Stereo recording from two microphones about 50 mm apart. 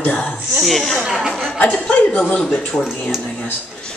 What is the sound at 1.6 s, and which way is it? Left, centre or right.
A man's voice, left.